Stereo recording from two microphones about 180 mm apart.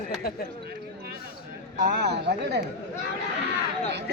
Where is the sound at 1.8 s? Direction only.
65° right (ahead or behind).